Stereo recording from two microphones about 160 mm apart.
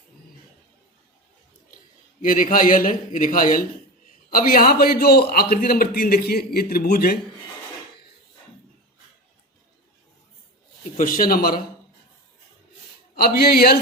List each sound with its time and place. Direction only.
2.2 s a man's voice: 60° left (ahead or behind)
10.9 s a man's voice: 60° left (ahead or behind)
13.2 s a man's voice: 70° left (ahead or behind)